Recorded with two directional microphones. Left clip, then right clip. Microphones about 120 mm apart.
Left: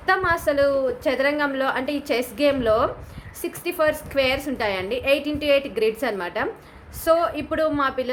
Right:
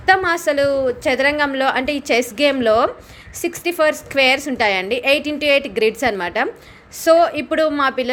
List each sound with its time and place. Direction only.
0.0 s a woman's voice: 45° right (ahead or behind)